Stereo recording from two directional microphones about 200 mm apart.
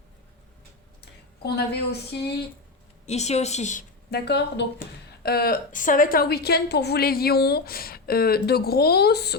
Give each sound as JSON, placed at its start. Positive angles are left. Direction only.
{"t": 1.0, "sound": "speech", "side_deg": 50}
{"t": 3.1, "sound": "a woman's voice", "side_deg": 35}
{"t": 4.1, "sound": "a woman's voice", "side_deg": 55}